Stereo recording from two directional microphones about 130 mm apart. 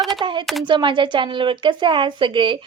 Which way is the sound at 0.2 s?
35° right (ahead or behind).